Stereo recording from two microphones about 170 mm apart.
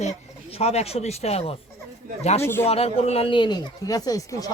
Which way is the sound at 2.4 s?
15° left (ahead or behind).